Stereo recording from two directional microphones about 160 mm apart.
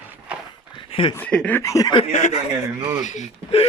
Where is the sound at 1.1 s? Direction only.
10° left (ahead or behind).